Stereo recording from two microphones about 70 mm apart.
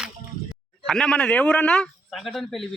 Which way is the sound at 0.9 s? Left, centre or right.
Centre.